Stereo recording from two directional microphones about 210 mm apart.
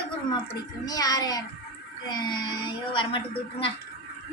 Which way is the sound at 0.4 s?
15° left (ahead or behind).